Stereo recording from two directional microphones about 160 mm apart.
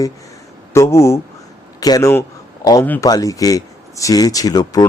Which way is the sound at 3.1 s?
20° left (ahead or behind).